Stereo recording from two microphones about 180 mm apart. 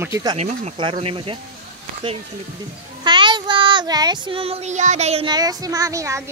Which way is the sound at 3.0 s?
25° right (ahead or behind).